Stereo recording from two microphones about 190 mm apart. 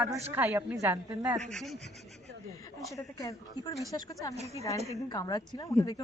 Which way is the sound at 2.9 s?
15° left (ahead or behind).